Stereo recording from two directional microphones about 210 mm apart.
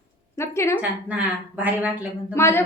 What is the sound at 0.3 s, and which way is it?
Speech, 15° left (ahead or behind).